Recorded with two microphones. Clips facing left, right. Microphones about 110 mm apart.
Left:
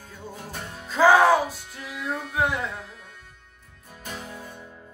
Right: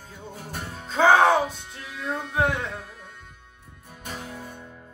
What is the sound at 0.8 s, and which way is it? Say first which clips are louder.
Music: left 1 dB; 25° right (ahead or behind).